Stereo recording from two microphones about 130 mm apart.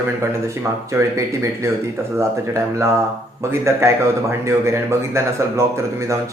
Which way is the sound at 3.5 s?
20° right (ahead or behind).